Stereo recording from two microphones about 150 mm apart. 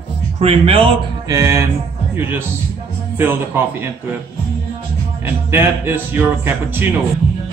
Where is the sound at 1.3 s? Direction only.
20° right (ahead or behind).